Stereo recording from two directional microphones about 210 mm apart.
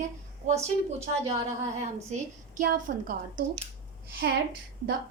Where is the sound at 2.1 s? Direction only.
35° right (ahead or behind).